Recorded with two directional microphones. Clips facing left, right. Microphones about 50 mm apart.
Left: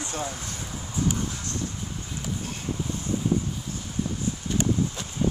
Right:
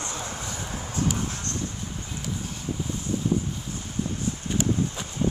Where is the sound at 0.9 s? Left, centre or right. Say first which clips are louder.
Left 1 dB; right.